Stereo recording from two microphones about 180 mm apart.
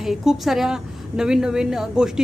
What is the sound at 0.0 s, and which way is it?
A woman's voice, centre (ahead or behind).